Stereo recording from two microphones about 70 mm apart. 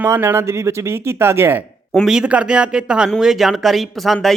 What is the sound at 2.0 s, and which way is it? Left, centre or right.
Speech, centre.